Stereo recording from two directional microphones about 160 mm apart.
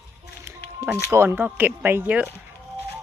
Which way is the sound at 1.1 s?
15° right (ahead or behind).